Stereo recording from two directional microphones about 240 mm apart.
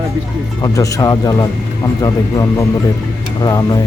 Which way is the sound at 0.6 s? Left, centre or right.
Centre.